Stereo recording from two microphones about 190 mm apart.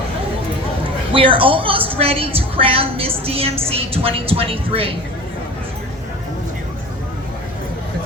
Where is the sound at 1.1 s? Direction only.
30° right (ahead or behind).